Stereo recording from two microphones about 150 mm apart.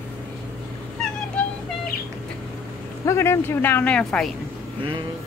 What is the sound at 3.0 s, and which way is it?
Speech, 20° left (ahead or behind).